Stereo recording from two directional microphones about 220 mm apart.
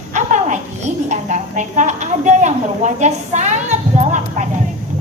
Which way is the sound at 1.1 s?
35° right (ahead or behind).